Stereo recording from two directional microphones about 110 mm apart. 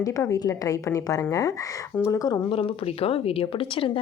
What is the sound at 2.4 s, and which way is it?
Speech, 55° left (ahead or behind).